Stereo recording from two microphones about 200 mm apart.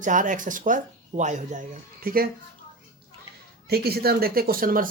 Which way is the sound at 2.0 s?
45° right (ahead or behind).